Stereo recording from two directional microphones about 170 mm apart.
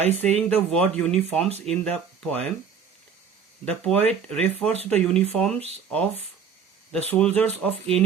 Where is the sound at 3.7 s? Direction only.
10° left (ahead or behind).